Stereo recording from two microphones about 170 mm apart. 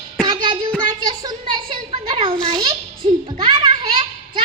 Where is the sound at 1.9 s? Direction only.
30° right (ahead or behind).